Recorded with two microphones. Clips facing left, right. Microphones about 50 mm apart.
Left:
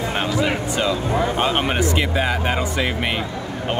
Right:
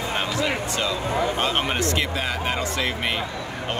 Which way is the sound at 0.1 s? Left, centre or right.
Left.